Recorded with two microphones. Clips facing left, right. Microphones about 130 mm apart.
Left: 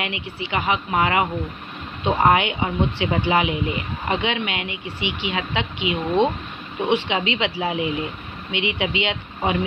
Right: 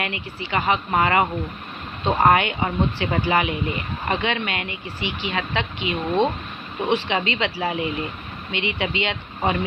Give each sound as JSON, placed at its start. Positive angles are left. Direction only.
{"t": 0.0, "sound": "speech", "side_deg": 15}